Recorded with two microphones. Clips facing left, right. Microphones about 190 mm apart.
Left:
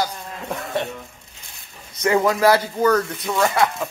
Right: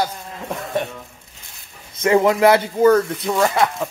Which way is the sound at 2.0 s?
25° right (ahead or behind).